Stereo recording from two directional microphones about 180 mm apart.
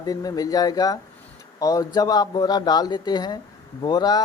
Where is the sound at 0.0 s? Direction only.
20° left (ahead or behind).